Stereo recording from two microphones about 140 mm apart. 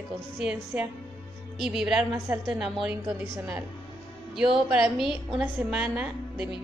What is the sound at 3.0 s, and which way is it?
Speech, 15° right (ahead or behind).